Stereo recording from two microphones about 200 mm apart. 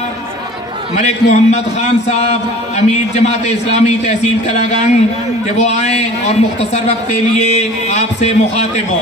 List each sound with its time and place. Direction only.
0.9 s a man's voice: 35° left (ahead or behind)